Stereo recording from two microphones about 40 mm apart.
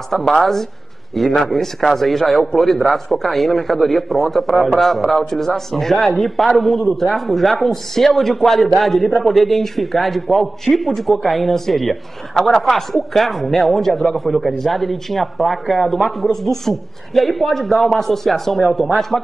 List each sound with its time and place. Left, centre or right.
0.1 s a man's voice: centre